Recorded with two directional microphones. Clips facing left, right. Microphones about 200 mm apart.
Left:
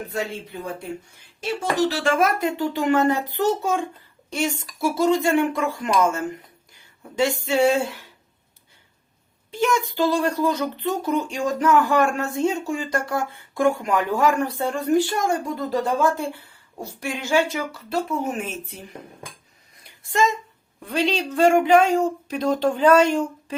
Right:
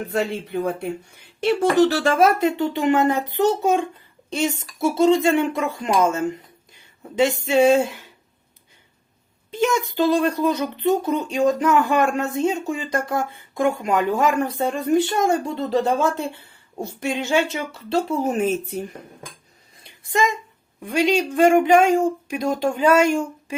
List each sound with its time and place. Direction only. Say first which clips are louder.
0.1 s speech: right 8 dB; 60° right (ahead or behind)
2.0 s speech: right 3 dB; 25° right (ahead or behind)
9.5 s speech: right 1 dB; 20° right (ahead or behind); by 18.9 s 40° right (ahead or behind)
19.8 s a sound: even; 15° right (ahead or behind)
20.8 s speech: right 4 dB; 10° right (ahead or behind)